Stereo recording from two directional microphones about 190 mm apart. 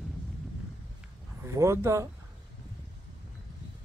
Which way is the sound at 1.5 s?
15° right (ahead or behind).